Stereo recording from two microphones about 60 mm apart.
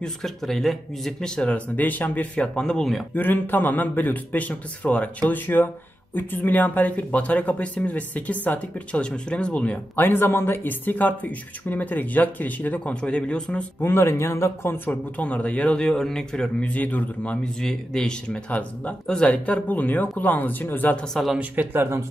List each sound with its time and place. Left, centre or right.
0.0 s speech: centre; by 2.4 s left
2.4 s speech: centre
3.2 s speech: left
9.9 s speech: left
12.8 s speech: centre
13.7 s a man's voice: left
14.9 s speech: left
17.4 s speech: centre
18.5 s speech: left
20.9 s speech: centre
21.4 s speech: right